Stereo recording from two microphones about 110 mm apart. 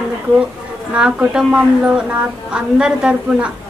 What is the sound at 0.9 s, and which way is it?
A woman's voice, 10° right (ahead or behind).